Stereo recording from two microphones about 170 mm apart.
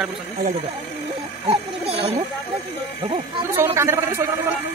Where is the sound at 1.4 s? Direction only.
35° right (ahead or behind).